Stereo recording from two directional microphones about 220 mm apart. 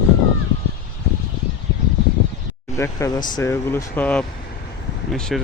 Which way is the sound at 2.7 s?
15° left (ahead or behind).